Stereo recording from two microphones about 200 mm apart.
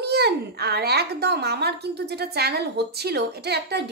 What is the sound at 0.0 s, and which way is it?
Speech, 55° right (ahead or behind).